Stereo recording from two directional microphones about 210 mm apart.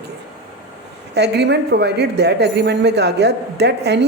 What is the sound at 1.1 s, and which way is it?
A woman's voice, 55° right (ahead or behind).